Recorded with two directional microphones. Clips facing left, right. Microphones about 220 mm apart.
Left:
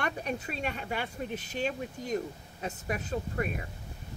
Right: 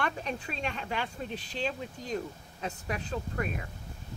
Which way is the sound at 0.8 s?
50° left (ahead or behind).